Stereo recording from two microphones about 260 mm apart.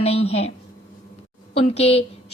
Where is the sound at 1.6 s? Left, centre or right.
Left.